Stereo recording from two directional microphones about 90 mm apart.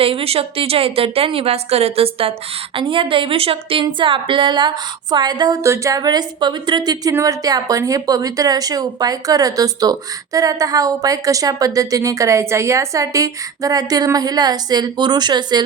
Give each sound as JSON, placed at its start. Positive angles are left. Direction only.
{"t": 0.0, "sound": "speech", "side_deg": -90}
{"t": 2.7, "sound": "a woman's voice", "side_deg": -75}
{"t": 5.6, "sound": "a woman's voice", "side_deg": -35}
{"t": 7.1, "sound": "a woman's voice", "side_deg": -35}